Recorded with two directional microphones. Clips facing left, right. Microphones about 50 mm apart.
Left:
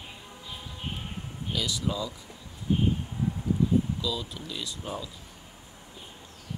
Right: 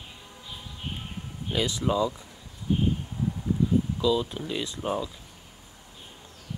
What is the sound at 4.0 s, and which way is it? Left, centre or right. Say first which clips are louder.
Speech: right 8 dB; right.